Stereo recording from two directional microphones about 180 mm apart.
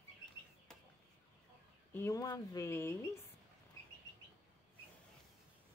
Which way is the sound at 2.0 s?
15° left (ahead or behind).